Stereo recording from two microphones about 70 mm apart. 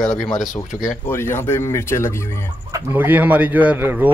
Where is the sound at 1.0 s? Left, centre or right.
Left.